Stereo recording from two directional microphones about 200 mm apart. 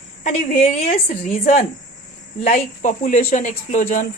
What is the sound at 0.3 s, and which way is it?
Speech, 30° left (ahead or behind).